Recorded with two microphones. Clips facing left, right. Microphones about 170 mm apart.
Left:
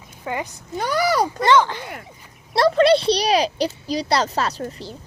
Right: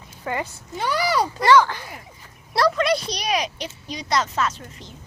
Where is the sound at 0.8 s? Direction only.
45° left (ahead or behind).